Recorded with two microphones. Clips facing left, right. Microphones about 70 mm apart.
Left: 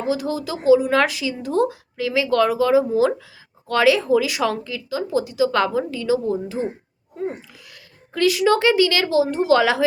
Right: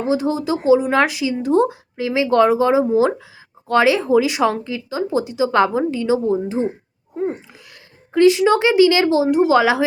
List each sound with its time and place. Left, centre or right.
0.0 s speech: right
8.1 s speech: right
9.3 s a woman's voice: centre